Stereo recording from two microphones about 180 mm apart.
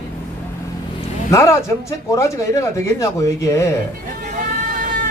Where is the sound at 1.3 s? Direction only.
15° left (ahead or behind).